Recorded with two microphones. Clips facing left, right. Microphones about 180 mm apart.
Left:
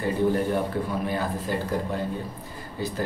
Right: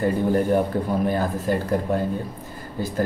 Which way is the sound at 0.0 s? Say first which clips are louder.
Right 3 dB; 45° right (ahead or behind).